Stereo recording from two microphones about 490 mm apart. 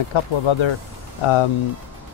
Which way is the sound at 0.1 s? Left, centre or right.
Left.